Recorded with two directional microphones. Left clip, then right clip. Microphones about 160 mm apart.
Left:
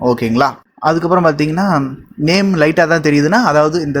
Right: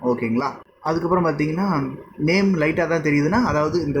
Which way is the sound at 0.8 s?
35° left (ahead or behind).